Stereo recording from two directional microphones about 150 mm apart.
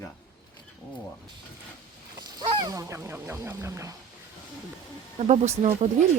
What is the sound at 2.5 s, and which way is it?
Speech, 30° right (ahead or behind).